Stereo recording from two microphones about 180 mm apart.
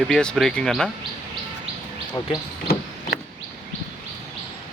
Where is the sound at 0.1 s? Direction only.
5° left (ahead or behind).